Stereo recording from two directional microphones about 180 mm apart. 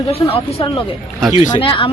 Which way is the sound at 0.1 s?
35° left (ahead or behind).